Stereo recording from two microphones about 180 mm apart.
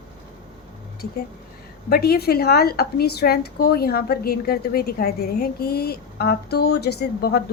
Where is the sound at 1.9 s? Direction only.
60° left (ahead or behind).